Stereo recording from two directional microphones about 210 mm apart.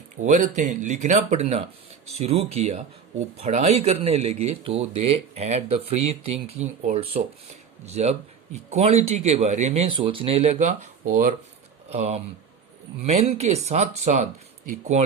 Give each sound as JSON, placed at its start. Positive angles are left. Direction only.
{"t": 0.2, "sound": "speech", "side_deg": -35}